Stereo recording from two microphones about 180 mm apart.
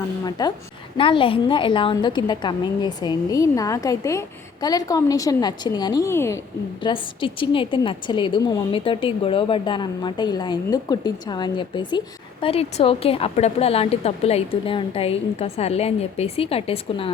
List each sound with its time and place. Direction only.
0.3 s a woman's voice: 20° left (ahead or behind)
6.8 s a woman's voice: 30° left (ahead or behind)